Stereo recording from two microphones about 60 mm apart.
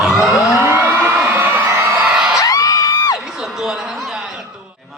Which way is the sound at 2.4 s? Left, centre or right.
Left.